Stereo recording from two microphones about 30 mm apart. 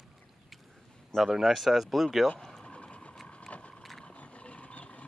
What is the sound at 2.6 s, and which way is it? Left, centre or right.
Vehicle, left.